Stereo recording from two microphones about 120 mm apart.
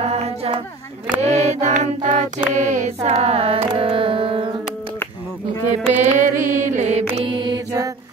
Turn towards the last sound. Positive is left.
turn(degrees=-35)  # may be behind; listen again after turning